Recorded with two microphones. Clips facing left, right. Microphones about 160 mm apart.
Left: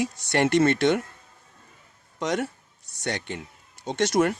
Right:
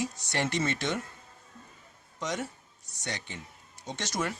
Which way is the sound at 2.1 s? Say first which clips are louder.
Left 7 dB; 65° left (ahead or behind).